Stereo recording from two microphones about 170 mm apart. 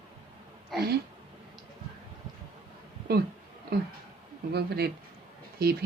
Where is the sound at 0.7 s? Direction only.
Centre (ahead or behind).